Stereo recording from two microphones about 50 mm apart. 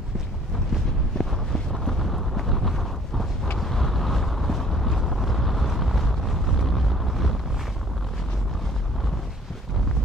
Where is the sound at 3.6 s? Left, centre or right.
Centre.